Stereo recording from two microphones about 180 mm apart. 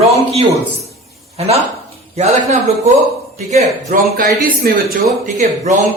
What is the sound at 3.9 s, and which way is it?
A man's voice, 55° right (ahead or behind).